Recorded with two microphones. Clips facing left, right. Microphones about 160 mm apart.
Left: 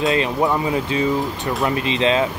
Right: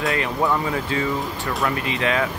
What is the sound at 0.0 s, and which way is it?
Speech, 20° left (ahead or behind).